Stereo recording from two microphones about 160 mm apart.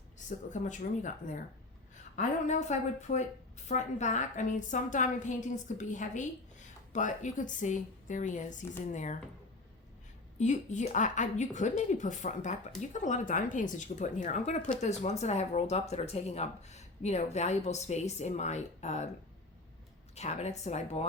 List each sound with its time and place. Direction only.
0.3 s a woman's voice: 50° left (ahead or behind)
2.1 s a woman's voice: 45° left (ahead or behind)
10.3 s a woman's voice: 50° left (ahead or behind)
20.1 s a woman's voice: 45° left (ahead or behind)